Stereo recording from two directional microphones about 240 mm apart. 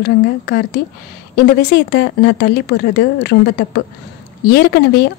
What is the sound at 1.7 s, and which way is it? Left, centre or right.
A woman's voice, left.